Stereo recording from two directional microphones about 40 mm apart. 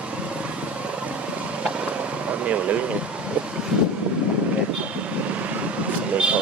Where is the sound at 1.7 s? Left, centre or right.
Right.